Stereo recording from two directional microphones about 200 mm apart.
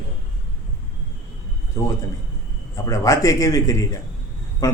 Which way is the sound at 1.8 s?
15° left (ahead or behind).